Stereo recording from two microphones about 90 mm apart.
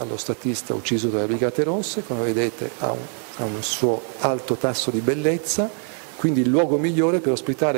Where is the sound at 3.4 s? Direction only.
20° left (ahead or behind).